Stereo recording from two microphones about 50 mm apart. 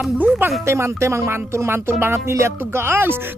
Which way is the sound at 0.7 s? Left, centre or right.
Right.